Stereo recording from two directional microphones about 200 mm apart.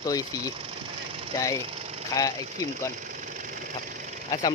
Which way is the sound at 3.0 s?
40° right (ahead or behind).